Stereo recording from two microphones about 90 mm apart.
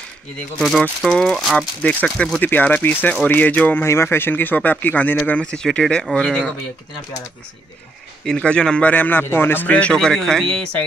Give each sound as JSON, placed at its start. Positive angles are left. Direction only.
{"t": 0.6, "sound": "speech", "side_deg": 0}
{"t": 1.8, "sound": "a man's voice", "side_deg": 15}
{"t": 2.4, "sound": "speech", "side_deg": 20}
{"t": 3.8, "sound": "a man's voice", "side_deg": 30}
{"t": 8.3, "sound": "a man's voice", "side_deg": 10}